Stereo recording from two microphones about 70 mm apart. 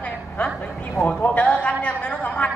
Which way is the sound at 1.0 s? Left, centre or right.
Centre.